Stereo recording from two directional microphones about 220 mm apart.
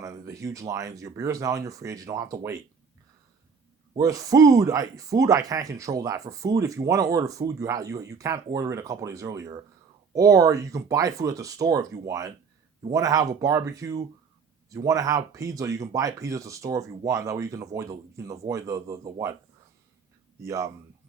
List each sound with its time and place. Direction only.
0.0 s speech: 15° right (ahead or behind)
3.9 s speech: 15° right (ahead or behind)
20.4 s speech: 15° right (ahead or behind)